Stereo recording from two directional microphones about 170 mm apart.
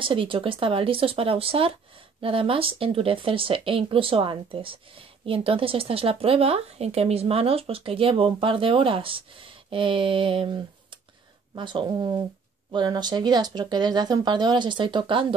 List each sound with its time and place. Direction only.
0.0 s speech: 30° right (ahead or behind)